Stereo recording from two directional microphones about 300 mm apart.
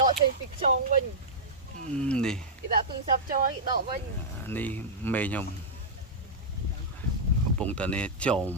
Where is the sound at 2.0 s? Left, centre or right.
Centre.